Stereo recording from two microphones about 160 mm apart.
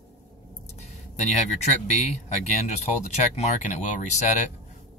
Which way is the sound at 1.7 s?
45° left (ahead or behind).